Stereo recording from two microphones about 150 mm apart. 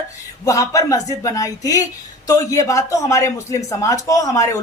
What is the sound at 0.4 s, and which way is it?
Speech, 20° left (ahead or behind).